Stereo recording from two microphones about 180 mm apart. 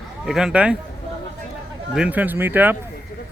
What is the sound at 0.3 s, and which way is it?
Speech, 5° right (ahead or behind).